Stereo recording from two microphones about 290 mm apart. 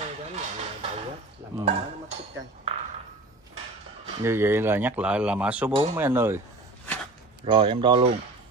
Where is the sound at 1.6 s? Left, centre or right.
Right.